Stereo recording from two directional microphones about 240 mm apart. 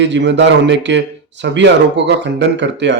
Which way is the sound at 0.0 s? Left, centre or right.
Right.